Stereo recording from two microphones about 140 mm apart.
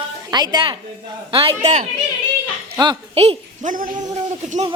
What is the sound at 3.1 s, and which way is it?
Speech, 45° right (ahead or behind).